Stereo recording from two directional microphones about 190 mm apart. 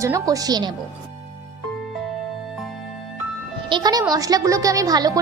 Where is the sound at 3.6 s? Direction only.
25° right (ahead or behind).